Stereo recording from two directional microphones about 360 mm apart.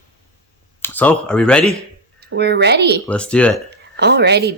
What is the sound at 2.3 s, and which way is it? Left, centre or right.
Speech, right.